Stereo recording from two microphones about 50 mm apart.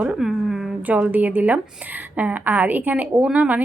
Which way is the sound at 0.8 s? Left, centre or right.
Right.